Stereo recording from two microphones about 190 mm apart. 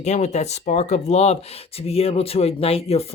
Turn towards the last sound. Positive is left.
turn(degrees=30)  # may be behind; listen again after turning